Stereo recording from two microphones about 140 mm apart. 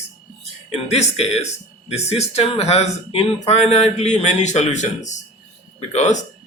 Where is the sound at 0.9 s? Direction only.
50° left (ahead or behind).